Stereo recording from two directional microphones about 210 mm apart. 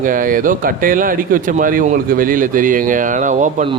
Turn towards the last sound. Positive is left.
turn(degrees=-35)  # may be behind; listen again after turning